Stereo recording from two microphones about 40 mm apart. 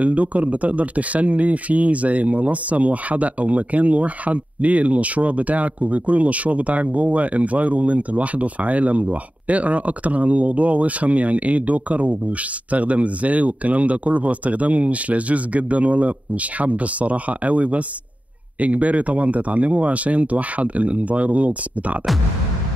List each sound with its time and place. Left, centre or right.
0.0 s speech: right